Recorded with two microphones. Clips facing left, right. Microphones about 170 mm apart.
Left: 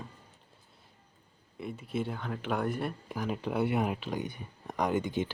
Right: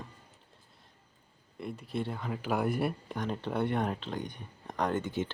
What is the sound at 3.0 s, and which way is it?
Speech, 5° left (ahead or behind).